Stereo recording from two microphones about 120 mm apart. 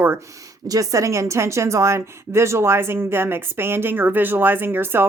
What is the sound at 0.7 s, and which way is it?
A woman's voice, 30° right (ahead or behind).